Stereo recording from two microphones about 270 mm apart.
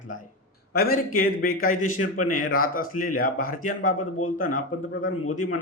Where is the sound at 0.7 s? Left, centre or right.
Left.